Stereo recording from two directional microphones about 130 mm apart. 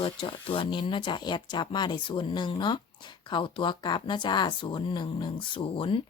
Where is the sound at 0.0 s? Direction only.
45° left (ahead or behind).